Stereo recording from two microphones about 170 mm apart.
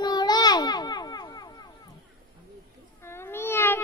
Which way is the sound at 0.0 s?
25° left (ahead or behind).